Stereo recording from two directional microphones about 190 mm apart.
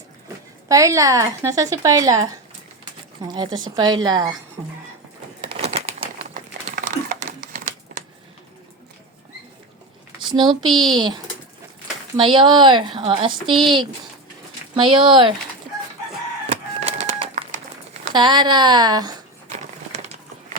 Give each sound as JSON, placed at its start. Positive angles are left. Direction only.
{"t": 0.7, "sound": "speech", "side_deg": -15}
{"t": 5.4, "sound": "a sound", "side_deg": -30}
{"t": 6.3, "sound": "a sound", "side_deg": -45}
{"t": 7.5, "sound": "crumpling", "side_deg": -45}
{"t": 10.2, "sound": "speech", "side_deg": -25}
{"t": 16.5, "sound": "crumpling", "side_deg": -35}
{"t": 18.1, "sound": "speech", "side_deg": -25}